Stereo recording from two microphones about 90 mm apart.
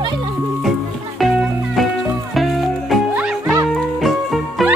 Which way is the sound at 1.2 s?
Centre (ahead or behind).